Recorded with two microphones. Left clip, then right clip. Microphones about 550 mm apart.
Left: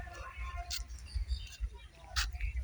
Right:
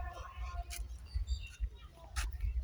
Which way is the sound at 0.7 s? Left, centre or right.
Right.